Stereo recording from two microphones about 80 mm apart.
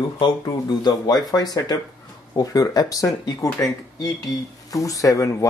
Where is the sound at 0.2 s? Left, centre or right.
Left.